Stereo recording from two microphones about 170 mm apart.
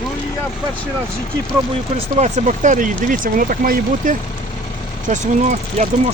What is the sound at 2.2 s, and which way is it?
Speech, 45° right (ahead or behind).